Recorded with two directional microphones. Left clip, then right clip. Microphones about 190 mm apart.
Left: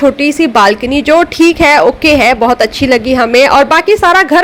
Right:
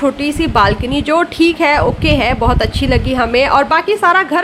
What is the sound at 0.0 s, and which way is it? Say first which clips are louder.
A woman's voice: left 6 dB; 20° left (ahead or behind).